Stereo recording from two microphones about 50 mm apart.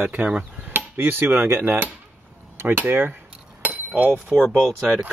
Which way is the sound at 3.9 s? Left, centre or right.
Right.